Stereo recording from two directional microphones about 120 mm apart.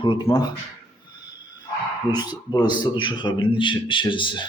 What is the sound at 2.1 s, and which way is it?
Speech, 35° left (ahead or behind).